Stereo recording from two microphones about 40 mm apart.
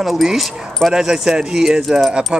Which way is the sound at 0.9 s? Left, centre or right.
Centre.